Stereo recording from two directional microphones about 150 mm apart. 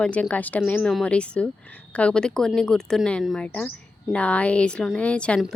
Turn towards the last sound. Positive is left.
turn(degrees=5)  # may be behind; listen again after turning